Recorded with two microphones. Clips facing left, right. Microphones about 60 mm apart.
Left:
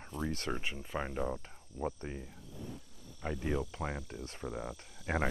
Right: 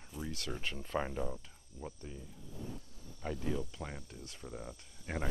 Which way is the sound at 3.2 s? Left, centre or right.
Left.